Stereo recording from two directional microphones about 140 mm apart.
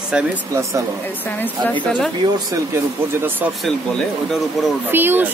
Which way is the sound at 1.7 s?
10° left (ahead or behind).